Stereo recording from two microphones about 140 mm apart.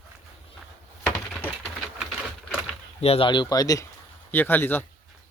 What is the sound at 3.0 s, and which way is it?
Speech, 45° left (ahead or behind).